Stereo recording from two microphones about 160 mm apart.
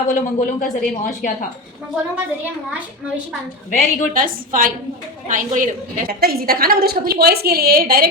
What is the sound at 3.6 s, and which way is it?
Speech, 55° left (ahead or behind).